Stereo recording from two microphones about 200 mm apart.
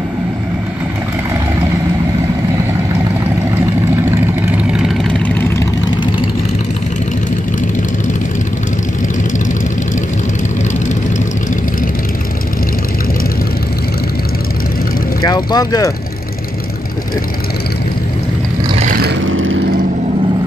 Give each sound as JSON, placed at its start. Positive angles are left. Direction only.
{"t": 4.5, "sound": "vehicle", "side_deg": -5}
{"t": 5.2, "sound": "vehicle", "side_deg": 10}
{"t": 15.2, "sound": "speech", "side_deg": 20}
{"t": 18.8, "sound": "vehicle", "side_deg": -45}
{"t": 19.2, "sound": "vehicle", "side_deg": -75}